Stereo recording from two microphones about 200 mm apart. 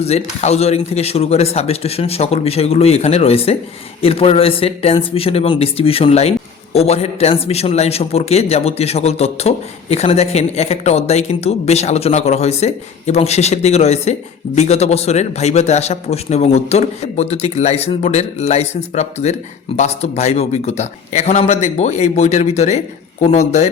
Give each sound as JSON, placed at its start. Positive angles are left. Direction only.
{"t": 0.0, "sound": "speech", "side_deg": 30}